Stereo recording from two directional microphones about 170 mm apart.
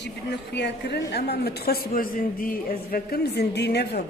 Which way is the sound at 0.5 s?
90° left.